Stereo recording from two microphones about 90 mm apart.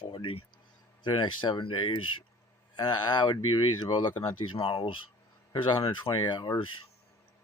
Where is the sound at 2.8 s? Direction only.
55° left (ahead or behind).